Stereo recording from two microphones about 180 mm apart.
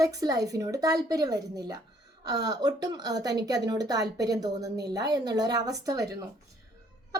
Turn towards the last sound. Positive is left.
turn(degrees=-20)  # may be behind; listen again after turning